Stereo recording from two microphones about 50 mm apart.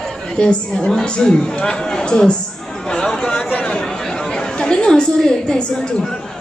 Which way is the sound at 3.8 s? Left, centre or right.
Centre.